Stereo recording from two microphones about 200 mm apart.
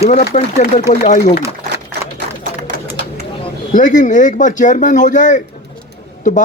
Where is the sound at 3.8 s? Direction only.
40° left (ahead or behind).